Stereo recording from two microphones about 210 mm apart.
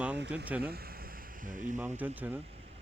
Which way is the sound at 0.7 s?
45° right (ahead or behind).